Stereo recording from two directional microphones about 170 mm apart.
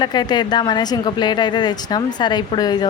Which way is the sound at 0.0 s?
25° left (ahead or behind).